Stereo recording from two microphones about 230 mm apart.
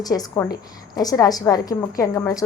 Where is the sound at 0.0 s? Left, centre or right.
Centre.